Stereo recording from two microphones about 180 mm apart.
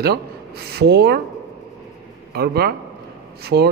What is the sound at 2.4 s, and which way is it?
Speech, 60° right (ahead or behind).